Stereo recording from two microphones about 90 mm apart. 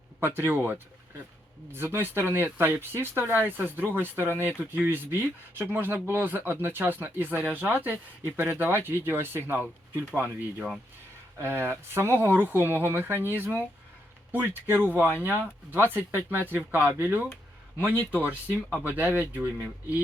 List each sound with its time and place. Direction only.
0.2 s speech: 25° right (ahead or behind)
11.3 s speech: 25° right (ahead or behind)